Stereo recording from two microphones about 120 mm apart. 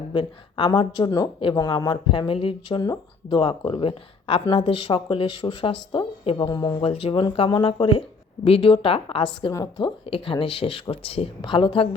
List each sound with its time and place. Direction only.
0.1 s speech: 40° left (ahead or behind)
2.8 s speech: 30° left (ahead or behind)
3.7 s speech: 45° left (ahead or behind)
6.8 s speech: 50° left (ahead or behind)